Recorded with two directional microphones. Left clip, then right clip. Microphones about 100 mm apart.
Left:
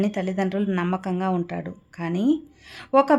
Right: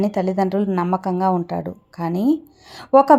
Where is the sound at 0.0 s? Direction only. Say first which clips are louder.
Right 6 dB; 25° right (ahead or behind).